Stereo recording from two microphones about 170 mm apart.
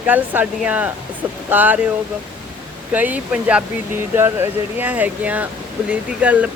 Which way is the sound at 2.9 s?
10° right (ahead or behind).